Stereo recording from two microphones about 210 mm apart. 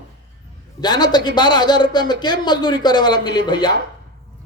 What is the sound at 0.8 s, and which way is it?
A man's voice, 20° left (ahead or behind).